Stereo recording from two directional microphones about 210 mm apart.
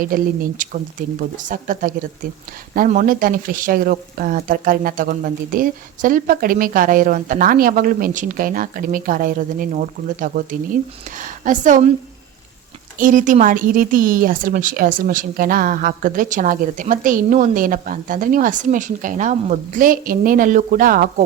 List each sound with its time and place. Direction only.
0.1 s speech: 40° right (ahead or behind)
13.0 s speech: 40° right (ahead or behind)